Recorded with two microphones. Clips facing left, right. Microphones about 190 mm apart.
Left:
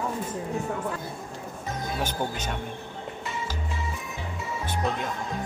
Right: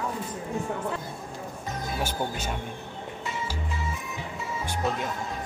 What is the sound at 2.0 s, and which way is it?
Speech, 10° right (ahead or behind).